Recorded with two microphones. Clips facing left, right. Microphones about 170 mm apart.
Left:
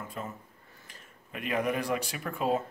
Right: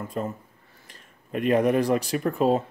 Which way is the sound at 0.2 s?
40° right (ahead or behind).